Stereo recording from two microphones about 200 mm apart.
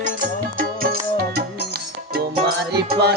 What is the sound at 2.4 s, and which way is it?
Music, 55° right (ahead or behind).